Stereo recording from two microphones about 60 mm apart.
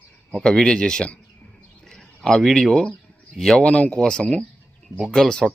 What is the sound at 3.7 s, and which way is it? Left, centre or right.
Speech, left.